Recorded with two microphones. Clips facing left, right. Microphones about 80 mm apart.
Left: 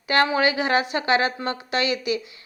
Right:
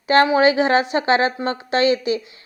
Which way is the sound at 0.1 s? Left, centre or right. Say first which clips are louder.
Right 6 dB; right.